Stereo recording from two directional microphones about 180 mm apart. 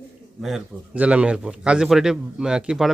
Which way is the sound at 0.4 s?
5° right (ahead or behind).